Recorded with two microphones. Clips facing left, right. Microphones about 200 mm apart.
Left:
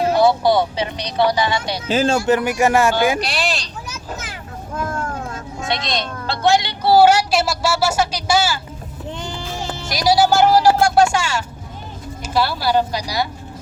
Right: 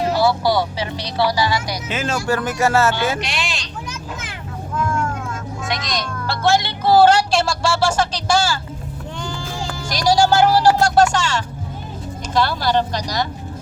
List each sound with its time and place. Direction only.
0.1 s speech: 20° left (ahead or behind)
3.2 s speech: 35° left (ahead or behind)
4.7 s speech: 40° left (ahead or behind); by 8.5 s 10° left (ahead or behind)
9.6 s music: 25° left (ahead or behind)
10.2 s speech: 10° left (ahead or behind)